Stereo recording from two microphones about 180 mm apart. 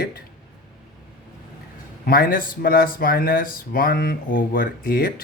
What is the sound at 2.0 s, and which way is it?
Speech, 55° left (ahead or behind).